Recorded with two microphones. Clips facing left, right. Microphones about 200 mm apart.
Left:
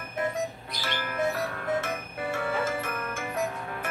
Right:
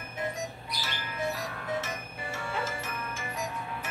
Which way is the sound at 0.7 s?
55° left (ahead or behind).